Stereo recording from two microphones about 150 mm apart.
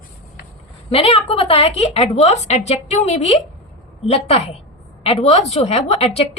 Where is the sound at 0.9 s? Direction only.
40° left (ahead or behind).